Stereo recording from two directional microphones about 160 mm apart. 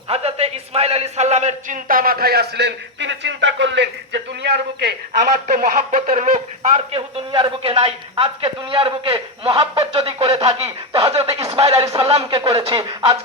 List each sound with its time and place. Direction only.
0.1 s a man's voice: 40° right (ahead or behind); by 4.9 s 90° right
5.5 s a man's voice: 65° right (ahead or behind)
6.7 s a man's voice: 40° right (ahead or behind)
10.6 s snicker: 40° right (ahead or behind)
11.3 s a sound: 40° right (ahead or behind)
12.5 s a man's voice: 35° right (ahead or behind)